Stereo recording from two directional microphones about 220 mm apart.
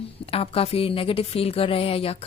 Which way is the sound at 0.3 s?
25° left (ahead or behind).